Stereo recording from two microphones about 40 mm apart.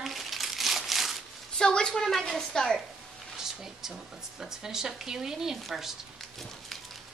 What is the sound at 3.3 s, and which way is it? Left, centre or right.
Speech, centre.